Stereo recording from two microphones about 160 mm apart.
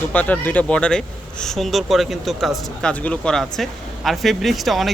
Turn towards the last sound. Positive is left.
turn(degrees=0)  # may be behind; listen again after turning